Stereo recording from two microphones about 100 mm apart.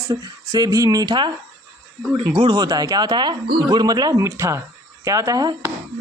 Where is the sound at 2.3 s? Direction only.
45° right (ahead or behind).